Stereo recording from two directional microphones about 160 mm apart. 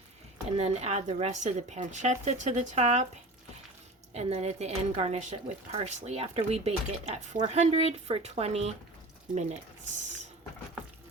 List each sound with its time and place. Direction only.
0.5 s a woman's voice: 40° right (ahead or behind)
4.1 s a woman's voice: 45° right (ahead or behind)